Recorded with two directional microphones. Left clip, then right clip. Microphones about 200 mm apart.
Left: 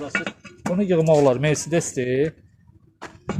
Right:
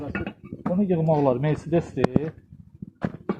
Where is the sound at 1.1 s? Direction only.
60° left (ahead or behind).